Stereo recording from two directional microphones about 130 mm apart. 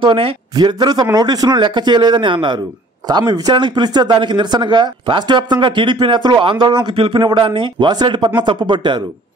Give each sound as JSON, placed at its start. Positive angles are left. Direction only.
{"t": 0.0, "sound": "speech", "side_deg": -40}